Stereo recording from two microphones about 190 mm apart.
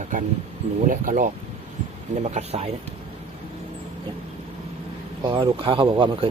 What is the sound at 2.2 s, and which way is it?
Speech, 35° right (ahead or behind).